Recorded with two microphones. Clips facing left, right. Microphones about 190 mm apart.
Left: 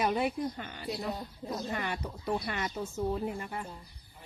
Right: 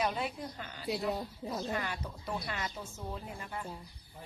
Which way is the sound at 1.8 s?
60° left (ahead or behind).